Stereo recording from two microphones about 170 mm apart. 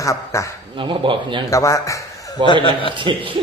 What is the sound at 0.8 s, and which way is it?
Speech, 30° right (ahead or behind).